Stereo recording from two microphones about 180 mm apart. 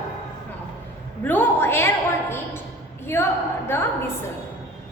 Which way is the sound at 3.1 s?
15° left (ahead or behind).